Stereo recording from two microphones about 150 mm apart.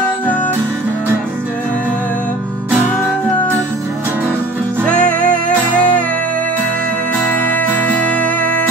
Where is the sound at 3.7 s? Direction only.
15° right (ahead or behind).